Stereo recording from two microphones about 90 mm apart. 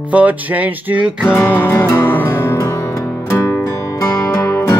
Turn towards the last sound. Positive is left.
turn(degrees=30)  # may be behind; listen again after turning